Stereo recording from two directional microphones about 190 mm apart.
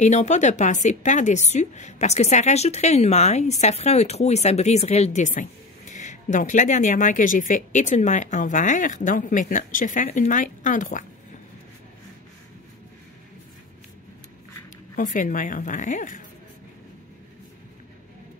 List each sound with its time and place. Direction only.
0.0 s speech: 40° left (ahead or behind)
15.0 s a woman's voice: 45° left (ahead or behind)